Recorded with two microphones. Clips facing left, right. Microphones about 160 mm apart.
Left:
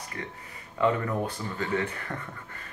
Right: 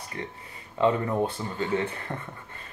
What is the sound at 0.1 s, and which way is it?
Speech, 25° right (ahead or behind).